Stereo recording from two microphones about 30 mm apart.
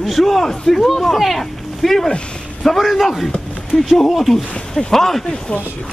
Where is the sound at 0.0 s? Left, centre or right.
Centre.